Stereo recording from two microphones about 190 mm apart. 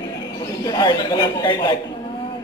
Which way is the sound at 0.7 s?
20° left (ahead or behind).